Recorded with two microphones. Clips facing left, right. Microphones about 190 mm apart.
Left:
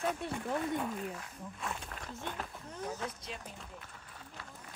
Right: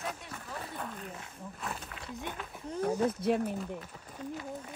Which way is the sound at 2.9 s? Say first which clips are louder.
Right 11 dB; 30° right (ahead or behind).